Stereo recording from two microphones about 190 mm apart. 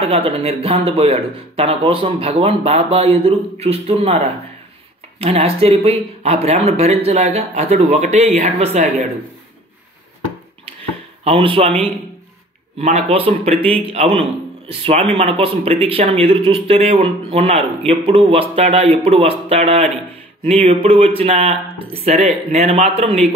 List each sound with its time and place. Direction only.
0.0 s speech: 30° right (ahead or behind)
11.2 s speech: 30° right (ahead or behind)